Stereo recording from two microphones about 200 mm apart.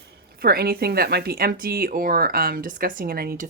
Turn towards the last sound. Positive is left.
turn(degrees=-50)  # may be behind; listen again after turning